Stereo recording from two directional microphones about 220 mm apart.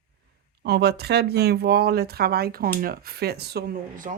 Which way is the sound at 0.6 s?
45° right (ahead or behind).